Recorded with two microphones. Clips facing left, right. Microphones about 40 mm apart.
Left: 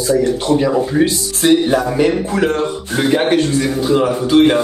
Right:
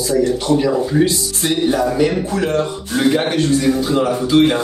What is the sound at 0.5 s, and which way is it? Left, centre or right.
A man's voice, left.